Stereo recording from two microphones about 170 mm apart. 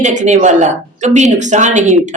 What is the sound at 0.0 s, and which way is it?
Speech, 45° right (ahead or behind).